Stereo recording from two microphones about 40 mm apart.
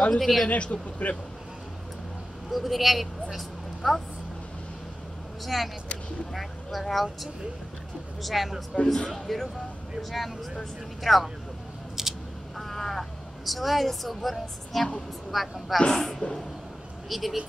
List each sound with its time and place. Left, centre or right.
0.2 s a woman's voice: centre
0.5 s a man's voice: left
2.5 s a woman's voice: centre
5.4 s a woman's voice: centre
8.2 s a woman's voice: centre
8.8 s speech: centre
9.1 s a woman's voice: centre
10.6 s a woman's voice: centre
12.0 s a sound: centre
12.5 s frog: centre
13.5 s a woman's voice: centre
17.1 s a woman's voice: centre